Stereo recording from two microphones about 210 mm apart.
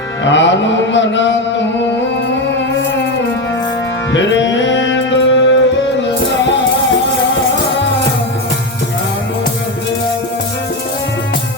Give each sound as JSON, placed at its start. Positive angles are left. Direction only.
{"t": 0.3, "sound": "mantra", "side_deg": 60}
{"t": 4.1, "sound": "music", "side_deg": 60}